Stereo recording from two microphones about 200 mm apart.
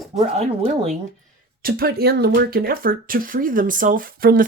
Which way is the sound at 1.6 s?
50° right (ahead or behind).